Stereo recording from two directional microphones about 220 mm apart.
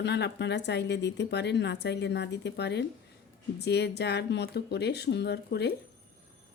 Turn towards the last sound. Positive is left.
turn(degrees=50)  # may be behind; listen again after turning